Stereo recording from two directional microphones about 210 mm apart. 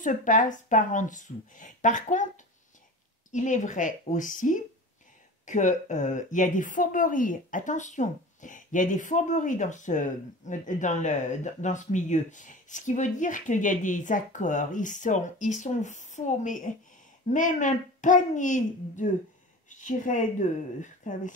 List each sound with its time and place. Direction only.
0.0 s speech: 40° left (ahead or behind)
3.3 s speech: 35° left (ahead or behind)